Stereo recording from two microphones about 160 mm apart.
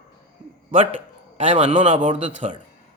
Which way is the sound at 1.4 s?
45° right (ahead or behind).